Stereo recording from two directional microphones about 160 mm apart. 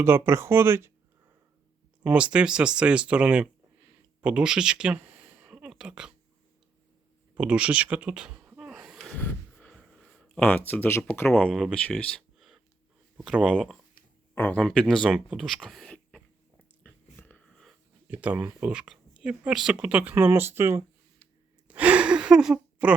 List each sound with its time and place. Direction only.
0.0 s speech: 15° right (ahead or behind)
2.0 s speech: 5° right (ahead or behind)
7.3 s a sound: 5° right (ahead or behind)
9.1 s snort: 10° left (ahead or behind)
9.7 s a sound: centre (ahead or behind)
11.0 s speech: 10° left (ahead or behind)
11.5 s speech: centre (ahead or behind)
13.1 s speech: centre (ahead or behind)
14.3 s speech: 10° left (ahead or behind)
16.8 s a sound: 10° left (ahead or behind)
18.1 s speech: 10° right (ahead or behind)
21.7 s gasp: 10° right (ahead or behind)